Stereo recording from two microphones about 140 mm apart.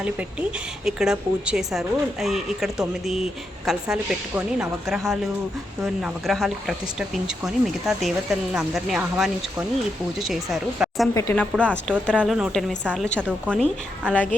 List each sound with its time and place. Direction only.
0.0 s a woman's voice: 10° right (ahead or behind)
11.1 s speech: 20° left (ahead or behind)
11.6 s speech: 10° left (ahead or behind)
13.1 s a woman's voice: 10° right (ahead or behind)